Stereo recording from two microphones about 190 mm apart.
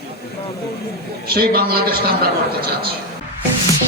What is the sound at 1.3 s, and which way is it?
Speech, 55° right (ahead or behind).